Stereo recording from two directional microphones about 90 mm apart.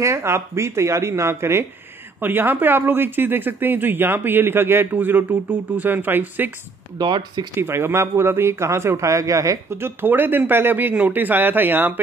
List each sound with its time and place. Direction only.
0.0 s speech: 30° right (ahead or behind)
7.0 s speech: 55° right (ahead or behind)
7.5 s speech: 25° right (ahead or behind)